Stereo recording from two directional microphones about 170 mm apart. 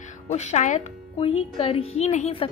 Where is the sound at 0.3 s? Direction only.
40° left (ahead or behind).